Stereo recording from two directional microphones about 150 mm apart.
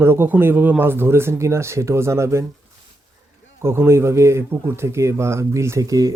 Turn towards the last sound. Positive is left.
turn(degrees=-20)  # may be behind; listen again after turning